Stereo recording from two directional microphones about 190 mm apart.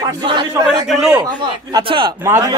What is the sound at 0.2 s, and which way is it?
Speech, 25° right (ahead or behind).